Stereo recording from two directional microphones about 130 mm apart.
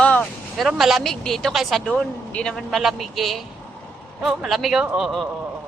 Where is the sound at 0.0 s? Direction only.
15° left (ahead or behind).